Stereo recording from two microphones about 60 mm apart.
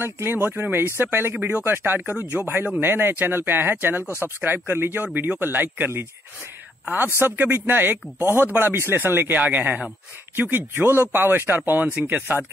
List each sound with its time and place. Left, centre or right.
0.0 s speech: right
7.2 s speech: right
9.4 s speech: right